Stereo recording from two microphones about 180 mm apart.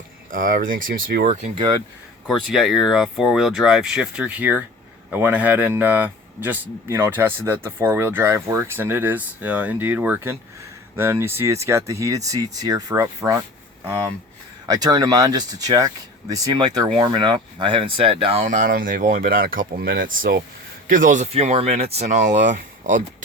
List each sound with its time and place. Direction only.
0.3 s speech: 50° right (ahead or behind)
2.2 s speech: centre (ahead or behind); by 13.4 s 20° right (ahead or behind)
14.7 s speech: 20° right (ahead or behind); by 23.0 s 45° right (ahead or behind)